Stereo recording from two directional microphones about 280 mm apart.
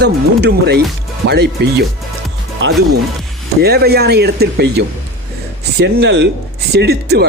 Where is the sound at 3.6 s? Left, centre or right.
Right.